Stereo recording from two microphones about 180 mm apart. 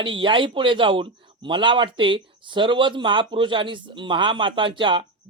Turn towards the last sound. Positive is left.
turn(degrees=-25)  # may be behind; listen again after turning